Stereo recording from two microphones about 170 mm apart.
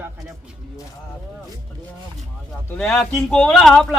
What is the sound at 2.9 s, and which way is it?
Speech, 5° left (ahead or behind).